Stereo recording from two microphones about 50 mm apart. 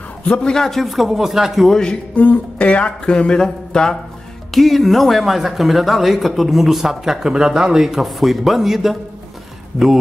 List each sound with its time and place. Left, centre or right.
0.3 s speech: centre
2.1 s speech: left
3.3 s a sound: centre
4.5 s speech: centre